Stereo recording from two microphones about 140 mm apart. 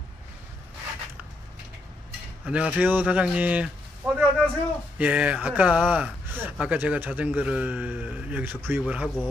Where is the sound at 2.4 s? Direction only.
10° right (ahead or behind).